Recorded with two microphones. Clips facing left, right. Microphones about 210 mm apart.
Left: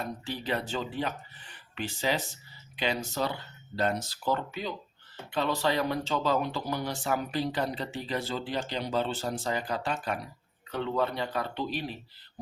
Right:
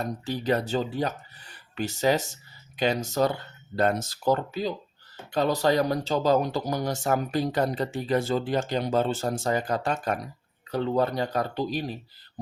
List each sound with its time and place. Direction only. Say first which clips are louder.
0.0 s speech: right 6 dB; 45° right (ahead or behind)